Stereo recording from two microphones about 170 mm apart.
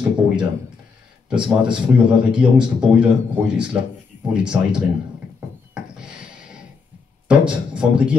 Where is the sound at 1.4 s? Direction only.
30° right (ahead or behind).